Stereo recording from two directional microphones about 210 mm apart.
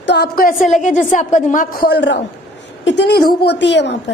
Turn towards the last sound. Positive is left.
turn(degrees=55)  # may be behind; listen again after turning